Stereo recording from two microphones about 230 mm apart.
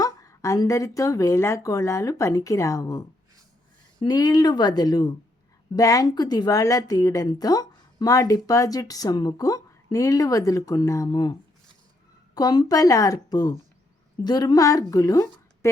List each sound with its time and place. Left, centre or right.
0.0 s a woman's voice: centre
4.0 s a woman's voice: centre